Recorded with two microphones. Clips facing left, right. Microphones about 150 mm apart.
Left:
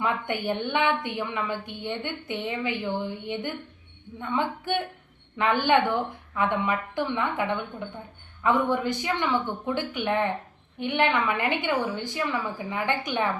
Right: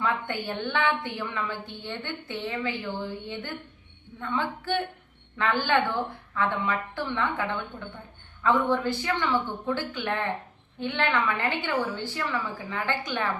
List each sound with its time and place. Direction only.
0.0 s a woman's voice: 15° left (ahead or behind)